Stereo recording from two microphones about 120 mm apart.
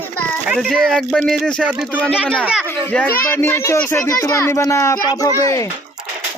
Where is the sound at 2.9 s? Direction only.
15° left (ahead or behind).